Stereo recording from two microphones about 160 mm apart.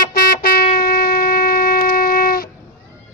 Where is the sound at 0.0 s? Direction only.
65° left (ahead or behind).